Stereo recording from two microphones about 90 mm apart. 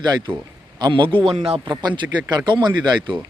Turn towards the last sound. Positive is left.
turn(degrees=-50)  # may be behind; listen again after turning